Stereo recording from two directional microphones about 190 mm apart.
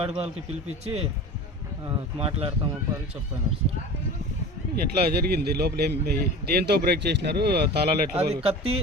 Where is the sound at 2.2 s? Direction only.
30° right (ahead or behind).